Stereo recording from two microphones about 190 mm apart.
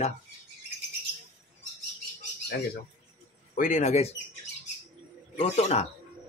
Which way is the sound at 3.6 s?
40° left (ahead or behind).